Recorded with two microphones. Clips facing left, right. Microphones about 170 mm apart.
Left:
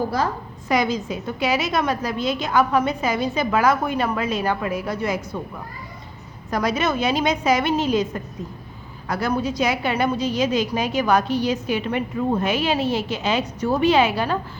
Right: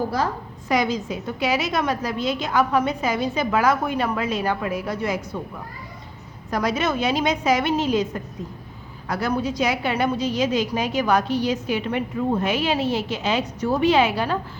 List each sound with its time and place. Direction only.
0.7 s a woman's voice: 55° left (ahead or behind)
6.5 s a woman's voice: 50° left (ahead or behind)